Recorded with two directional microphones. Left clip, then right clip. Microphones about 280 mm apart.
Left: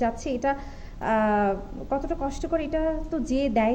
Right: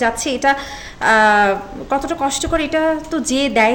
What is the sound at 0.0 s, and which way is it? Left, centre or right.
A woman's voice, centre.